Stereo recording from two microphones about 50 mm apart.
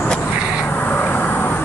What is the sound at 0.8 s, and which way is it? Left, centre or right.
Vehicle, left.